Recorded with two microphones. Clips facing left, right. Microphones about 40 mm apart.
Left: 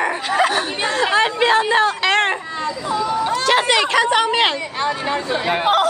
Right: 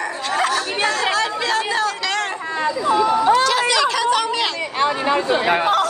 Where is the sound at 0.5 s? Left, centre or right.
Left.